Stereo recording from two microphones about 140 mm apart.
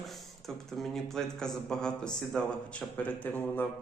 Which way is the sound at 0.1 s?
Centre (ahead or behind).